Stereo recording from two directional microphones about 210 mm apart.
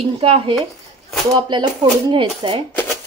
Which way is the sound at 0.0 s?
25° right (ahead or behind).